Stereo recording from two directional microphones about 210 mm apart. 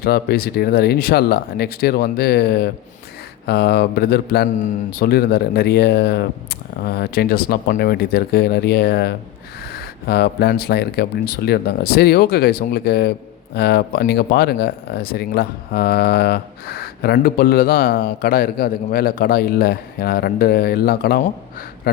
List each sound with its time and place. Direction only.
0.0 s speech: 50° left (ahead or behind)